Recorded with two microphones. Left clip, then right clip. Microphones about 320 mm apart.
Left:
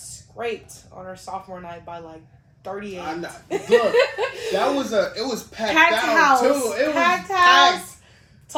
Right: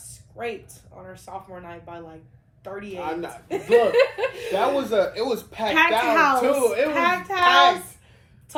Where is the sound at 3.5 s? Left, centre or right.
Centre.